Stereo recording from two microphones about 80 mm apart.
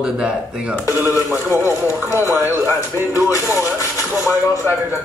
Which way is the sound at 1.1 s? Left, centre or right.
Left.